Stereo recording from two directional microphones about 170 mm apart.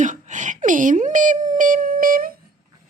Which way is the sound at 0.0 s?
45° right (ahead or behind).